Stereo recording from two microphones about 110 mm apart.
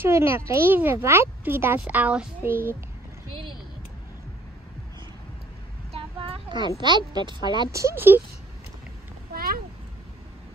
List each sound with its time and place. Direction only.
0.0 s a child's voice: 25° right (ahead or behind)
5.9 s a sound: 50° right (ahead or behind)
6.8 s speech: 40° right (ahead or behind)
7.7 s a child's voice: 25° right (ahead or behind)